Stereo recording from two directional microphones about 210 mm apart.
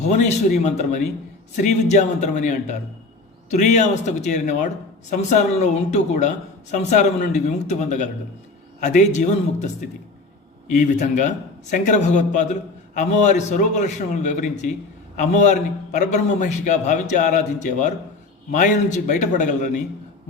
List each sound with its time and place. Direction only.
0.0 s speech: 35° left (ahead or behind)
10.7 s speech: 35° left (ahead or behind)